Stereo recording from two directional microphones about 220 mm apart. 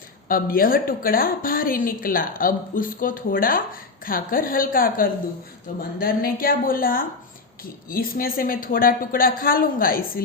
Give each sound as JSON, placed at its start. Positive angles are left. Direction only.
{"t": 0.3, "sound": "a woman's voice", "side_deg": 40}